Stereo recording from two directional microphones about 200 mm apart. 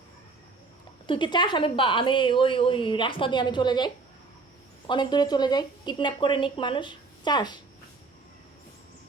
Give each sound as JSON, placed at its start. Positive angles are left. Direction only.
{"t": 1.0, "sound": "a woman's voice", "side_deg": 25}